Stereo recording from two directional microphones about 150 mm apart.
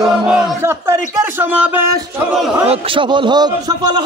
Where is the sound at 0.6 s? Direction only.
15° right (ahead or behind).